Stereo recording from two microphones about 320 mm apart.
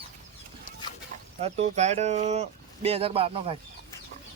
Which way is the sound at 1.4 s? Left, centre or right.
Right.